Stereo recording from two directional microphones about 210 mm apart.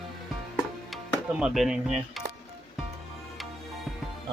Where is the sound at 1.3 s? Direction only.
Centre (ahead or behind).